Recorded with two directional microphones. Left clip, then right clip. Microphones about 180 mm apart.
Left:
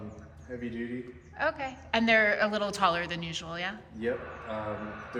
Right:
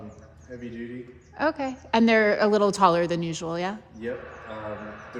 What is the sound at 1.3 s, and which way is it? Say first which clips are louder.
A woman's voice: right 5 dB; 45° right (ahead or behind).